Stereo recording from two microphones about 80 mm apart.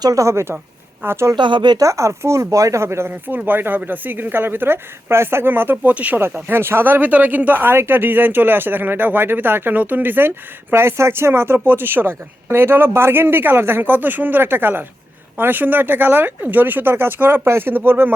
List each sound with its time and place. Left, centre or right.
0.0 s speech: right
1.4 s speech: right
1.8 s speech: right; by 6.2 s centre
6.2 s speech: right